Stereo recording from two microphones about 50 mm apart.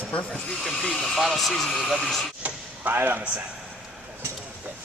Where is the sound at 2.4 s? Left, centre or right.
Right.